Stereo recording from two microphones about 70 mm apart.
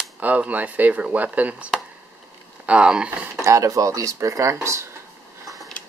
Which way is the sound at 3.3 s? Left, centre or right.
Right.